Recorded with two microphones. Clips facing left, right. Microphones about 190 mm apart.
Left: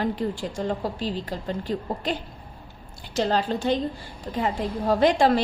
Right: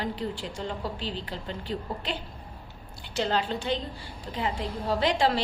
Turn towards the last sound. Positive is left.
turn(degrees=50)  # may be behind; listen again after turning